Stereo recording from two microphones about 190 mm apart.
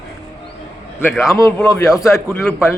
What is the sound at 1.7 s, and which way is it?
Speech, 20° left (ahead or behind).